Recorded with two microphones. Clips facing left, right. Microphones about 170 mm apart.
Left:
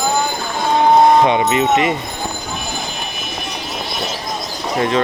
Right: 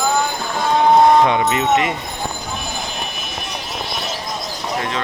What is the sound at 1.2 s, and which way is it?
Speech, 20° left (ahead or behind).